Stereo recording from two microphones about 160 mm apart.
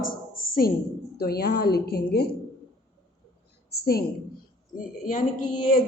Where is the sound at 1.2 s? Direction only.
75° left (ahead or behind).